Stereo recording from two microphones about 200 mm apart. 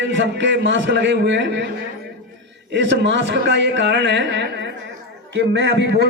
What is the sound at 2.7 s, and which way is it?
A man's voice, 65° right (ahead or behind).